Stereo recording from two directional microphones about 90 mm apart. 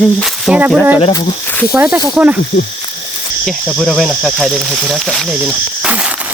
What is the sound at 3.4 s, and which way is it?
Speech, 5° left (ahead or behind).